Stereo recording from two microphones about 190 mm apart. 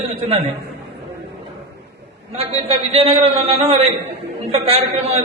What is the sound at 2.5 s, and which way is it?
A man's voice, 35° right (ahead or behind).